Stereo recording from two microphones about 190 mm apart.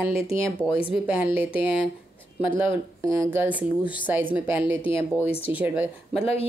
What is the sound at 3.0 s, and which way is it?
Speech, 15° right (ahead or behind).